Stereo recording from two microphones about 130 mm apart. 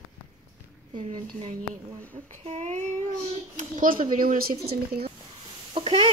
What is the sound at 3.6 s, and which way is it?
Speech, 90° right.